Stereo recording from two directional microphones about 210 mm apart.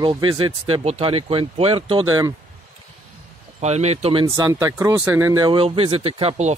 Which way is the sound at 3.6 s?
30° right (ahead or behind).